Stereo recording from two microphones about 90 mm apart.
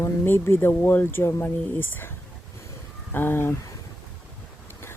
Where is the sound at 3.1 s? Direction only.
25° left (ahead or behind).